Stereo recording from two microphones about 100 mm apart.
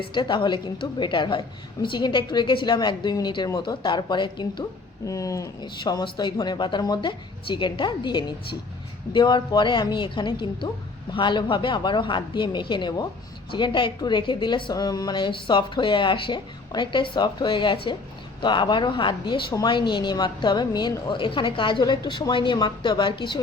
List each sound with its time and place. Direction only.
0.1 s a woman's voice: 55° left (ahead or behind)
5.0 s speech: 35° left (ahead or behind)
5.7 s a woman's voice: 45° left (ahead or behind)